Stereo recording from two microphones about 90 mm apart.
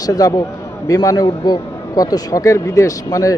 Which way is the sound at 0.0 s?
40° left (ahead or behind).